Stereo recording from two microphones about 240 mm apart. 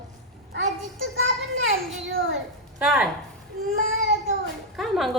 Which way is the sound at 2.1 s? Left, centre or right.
Right.